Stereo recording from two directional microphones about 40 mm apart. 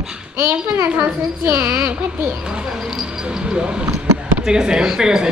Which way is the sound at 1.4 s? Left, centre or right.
Right.